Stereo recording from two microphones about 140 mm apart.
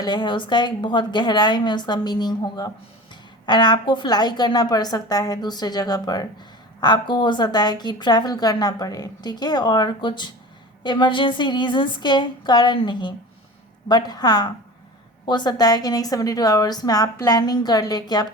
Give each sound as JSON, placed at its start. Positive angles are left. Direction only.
{"t": 0.0, "sound": "a woman's voice", "side_deg": 30}